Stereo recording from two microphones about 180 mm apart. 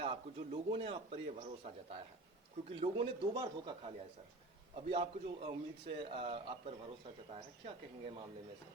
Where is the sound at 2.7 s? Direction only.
30° right (ahead or behind).